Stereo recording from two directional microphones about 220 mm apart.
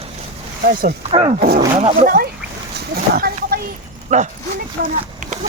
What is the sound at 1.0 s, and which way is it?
Speech, 25° right (ahead or behind).